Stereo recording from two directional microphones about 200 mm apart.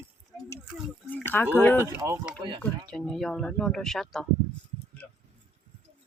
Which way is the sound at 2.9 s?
5° left (ahead or behind).